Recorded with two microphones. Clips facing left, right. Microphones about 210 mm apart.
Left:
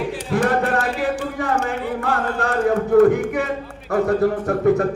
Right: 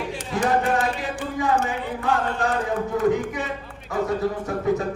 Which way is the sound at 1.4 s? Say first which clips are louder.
Right 2 dB; 60° left (ahead or behind).